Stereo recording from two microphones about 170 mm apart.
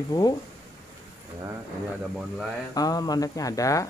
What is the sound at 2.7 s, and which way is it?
Speech, 20° left (ahead or behind).